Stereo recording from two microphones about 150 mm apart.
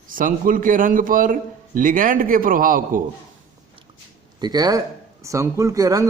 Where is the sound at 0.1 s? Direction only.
65° right (ahead or behind).